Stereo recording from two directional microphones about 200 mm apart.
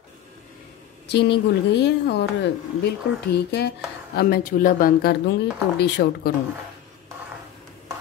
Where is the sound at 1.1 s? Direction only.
60° left (ahead or behind).